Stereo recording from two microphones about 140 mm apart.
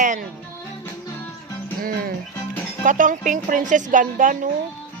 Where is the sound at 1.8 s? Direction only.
90° right.